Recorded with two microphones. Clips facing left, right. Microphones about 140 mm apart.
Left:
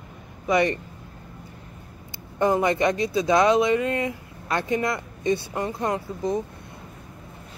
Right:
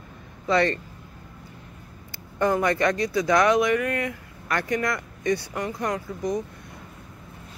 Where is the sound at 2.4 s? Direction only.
20° left (ahead or behind).